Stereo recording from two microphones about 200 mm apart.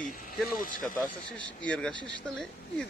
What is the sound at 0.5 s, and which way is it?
Speech, 40° left (ahead or behind).